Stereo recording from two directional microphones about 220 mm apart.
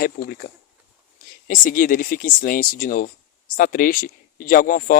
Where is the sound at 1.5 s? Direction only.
40° left (ahead or behind).